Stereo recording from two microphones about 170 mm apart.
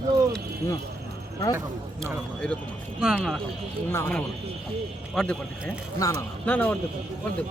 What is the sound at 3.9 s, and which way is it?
Speech, 15° left (ahead or behind).